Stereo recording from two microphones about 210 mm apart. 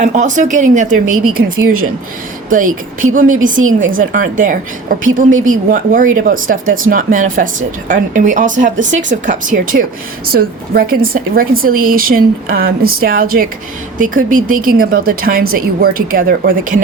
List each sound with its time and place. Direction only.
0.0 s a woman's voice: 35° right (ahead or behind)